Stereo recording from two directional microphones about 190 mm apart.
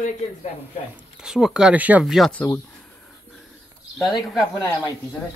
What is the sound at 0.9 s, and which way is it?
Speech, 5° right (ahead or behind).